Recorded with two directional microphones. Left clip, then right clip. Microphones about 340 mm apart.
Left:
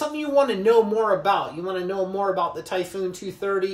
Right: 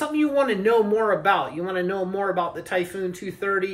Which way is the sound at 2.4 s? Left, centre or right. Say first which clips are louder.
Even; centre.